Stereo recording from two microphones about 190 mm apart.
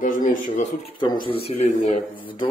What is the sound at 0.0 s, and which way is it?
Speech, 45° left (ahead or behind).